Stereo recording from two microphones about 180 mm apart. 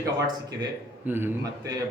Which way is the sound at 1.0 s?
10° right (ahead or behind).